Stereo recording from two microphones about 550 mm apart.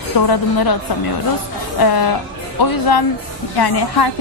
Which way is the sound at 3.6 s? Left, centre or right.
Left.